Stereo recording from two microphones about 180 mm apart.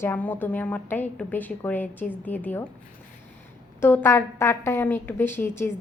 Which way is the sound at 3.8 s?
10° left (ahead or behind).